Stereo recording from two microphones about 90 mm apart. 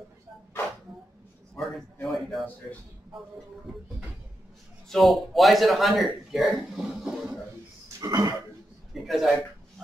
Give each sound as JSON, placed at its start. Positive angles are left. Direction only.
{"t": 2.0, "sound": "a sound", "side_deg": 0}
{"t": 4.8, "sound": "a man's voice", "side_deg": 0}
{"t": 8.0, "sound": "speech", "side_deg": -45}
{"t": 9.0, "sound": "a man's voice", "side_deg": 0}